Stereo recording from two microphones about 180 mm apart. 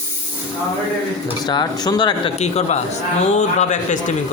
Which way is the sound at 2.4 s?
40° left (ahead or behind).